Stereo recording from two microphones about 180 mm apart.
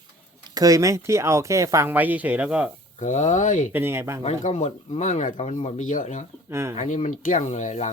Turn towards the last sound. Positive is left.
turn(degrees=40)  # may be behind; listen again after turning